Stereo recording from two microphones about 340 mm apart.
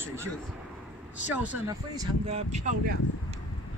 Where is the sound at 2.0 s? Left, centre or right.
Centre.